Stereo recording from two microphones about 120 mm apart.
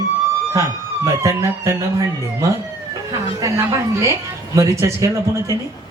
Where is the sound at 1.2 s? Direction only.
25° right (ahead or behind).